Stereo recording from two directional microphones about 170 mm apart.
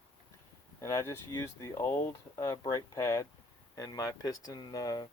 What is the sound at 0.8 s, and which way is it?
Speech, 15° left (ahead or behind).